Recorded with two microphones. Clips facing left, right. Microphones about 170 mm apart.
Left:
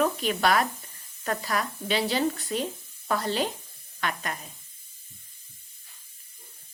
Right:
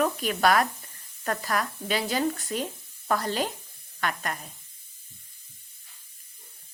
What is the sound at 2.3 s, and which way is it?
Speech, 45° right (ahead or behind).